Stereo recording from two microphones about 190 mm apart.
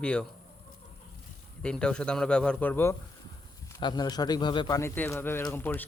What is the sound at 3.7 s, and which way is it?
A man's voice, 20° left (ahead or behind).